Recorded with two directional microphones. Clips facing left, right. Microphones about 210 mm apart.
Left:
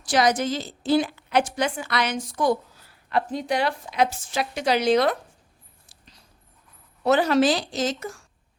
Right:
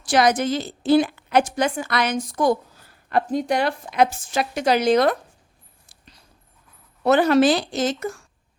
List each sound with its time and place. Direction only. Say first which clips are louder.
0.1 s a woman's voice: right 3 dB; 55° right (ahead or behind)
7.0 s a woman's voice: right 3 dB; 55° right (ahead or behind)